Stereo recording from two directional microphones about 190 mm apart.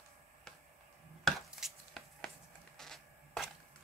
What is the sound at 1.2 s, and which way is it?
Chopping, centre (ahead or behind).